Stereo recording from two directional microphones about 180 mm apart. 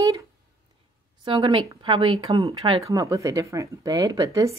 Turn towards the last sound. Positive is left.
turn(degrees=-15)  # may be behind; listen again after turning